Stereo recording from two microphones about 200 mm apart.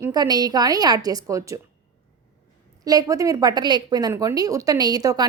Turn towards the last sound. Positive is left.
turn(degrees=-20)  # may be behind; listen again after turning